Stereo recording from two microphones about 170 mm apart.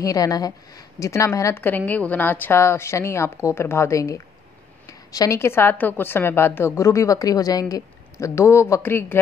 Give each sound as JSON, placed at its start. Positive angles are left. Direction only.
{"t": 0.0, "sound": "a woman's voice", "side_deg": 20}